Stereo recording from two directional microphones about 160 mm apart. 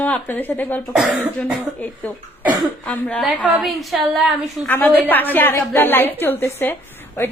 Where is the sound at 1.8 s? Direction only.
10° left (ahead or behind).